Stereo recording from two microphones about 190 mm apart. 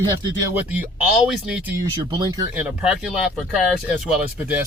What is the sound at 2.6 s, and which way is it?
Speech, 5° right (ahead or behind).